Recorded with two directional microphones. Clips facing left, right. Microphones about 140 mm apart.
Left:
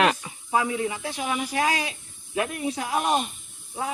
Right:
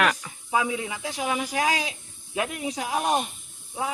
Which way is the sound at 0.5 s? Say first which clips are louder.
Left 2 dB; 10° right (ahead or behind).